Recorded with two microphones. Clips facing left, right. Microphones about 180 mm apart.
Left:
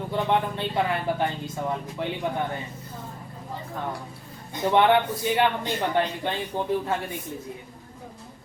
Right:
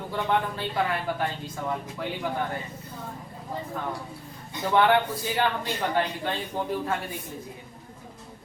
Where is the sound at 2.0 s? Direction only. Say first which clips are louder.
Left 4 dB; 25° left (ahead or behind).